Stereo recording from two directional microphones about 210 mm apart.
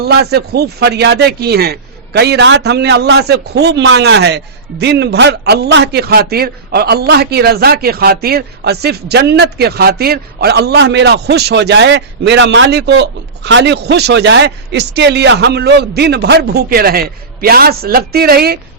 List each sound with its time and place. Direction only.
0.0 s speech: 50° right (ahead or behind)